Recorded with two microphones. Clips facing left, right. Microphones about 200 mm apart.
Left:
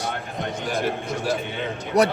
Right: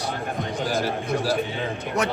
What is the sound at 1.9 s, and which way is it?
Speech, 35° left (ahead or behind).